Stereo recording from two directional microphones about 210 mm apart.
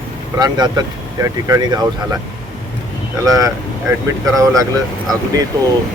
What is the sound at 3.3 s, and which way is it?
Speech, 15° right (ahead or behind).